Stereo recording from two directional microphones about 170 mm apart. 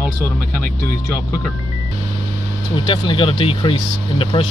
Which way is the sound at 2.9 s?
30° left (ahead or behind).